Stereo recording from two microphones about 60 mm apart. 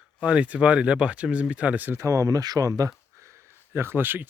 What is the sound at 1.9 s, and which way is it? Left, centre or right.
Speech, right.